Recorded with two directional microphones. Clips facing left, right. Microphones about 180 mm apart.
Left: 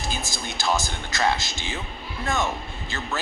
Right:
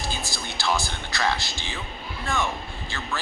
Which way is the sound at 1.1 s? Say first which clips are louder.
Left 2 dB; 20° left (ahead or behind).